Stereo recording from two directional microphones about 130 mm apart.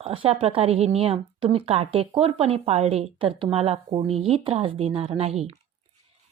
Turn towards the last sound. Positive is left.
turn(degrees=-50)  # may be behind; listen again after turning